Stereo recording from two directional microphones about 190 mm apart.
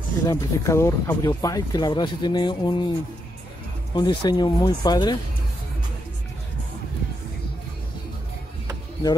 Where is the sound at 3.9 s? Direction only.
20° left (ahead or behind).